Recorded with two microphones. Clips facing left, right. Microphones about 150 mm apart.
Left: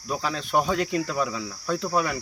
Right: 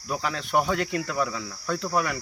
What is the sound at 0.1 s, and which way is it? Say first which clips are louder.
Cricket: left 1 dB; 20° left (ahead or behind).